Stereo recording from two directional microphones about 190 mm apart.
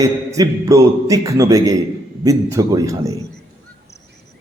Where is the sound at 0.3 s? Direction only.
15° right (ahead or behind).